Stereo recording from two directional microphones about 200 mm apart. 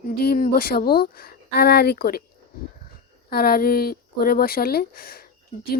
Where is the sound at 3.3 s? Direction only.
50° left (ahead or behind).